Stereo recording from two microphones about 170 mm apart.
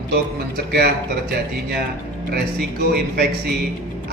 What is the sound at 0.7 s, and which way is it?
Speech, 70° right (ahead or behind).